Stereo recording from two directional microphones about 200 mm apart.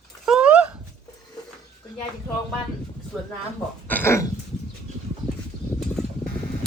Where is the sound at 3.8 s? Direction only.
10° left (ahead or behind).